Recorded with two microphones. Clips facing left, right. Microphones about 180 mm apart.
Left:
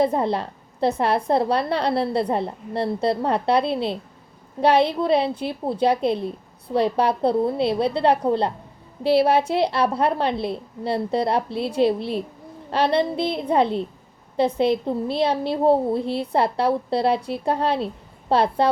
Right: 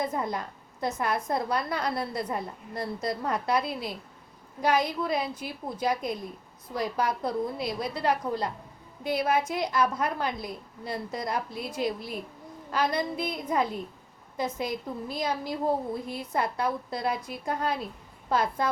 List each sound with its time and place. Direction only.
0.0 s a woman's voice: 30° left (ahead or behind)